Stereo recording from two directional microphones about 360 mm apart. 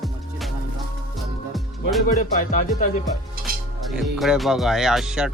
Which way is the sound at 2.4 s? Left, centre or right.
Left.